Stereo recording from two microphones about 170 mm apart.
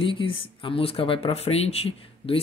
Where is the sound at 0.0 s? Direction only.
30° left (ahead or behind).